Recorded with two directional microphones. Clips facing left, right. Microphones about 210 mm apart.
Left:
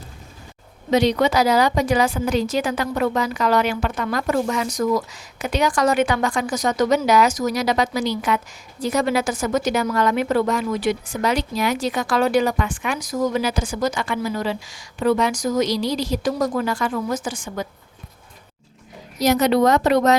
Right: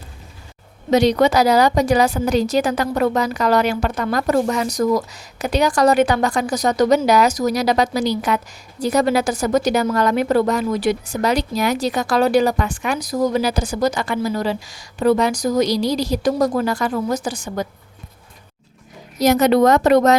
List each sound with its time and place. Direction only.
0.9 s a woman's voice: 40° right (ahead or behind)
19.2 s a woman's voice: 50° right (ahead or behind)